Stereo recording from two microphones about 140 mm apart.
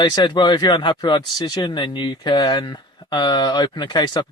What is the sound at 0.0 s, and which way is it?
Speech, 30° left (ahead or behind).